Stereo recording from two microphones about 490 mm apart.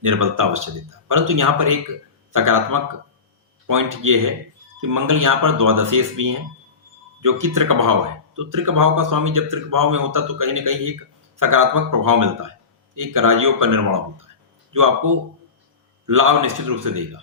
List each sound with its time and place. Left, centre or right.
0.0 s speech: right